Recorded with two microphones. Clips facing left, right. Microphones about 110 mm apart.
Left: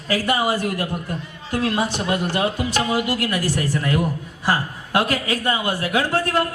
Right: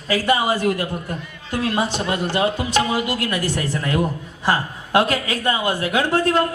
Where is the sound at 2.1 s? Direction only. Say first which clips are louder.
Right 1 dB; 20° right (ahead or behind).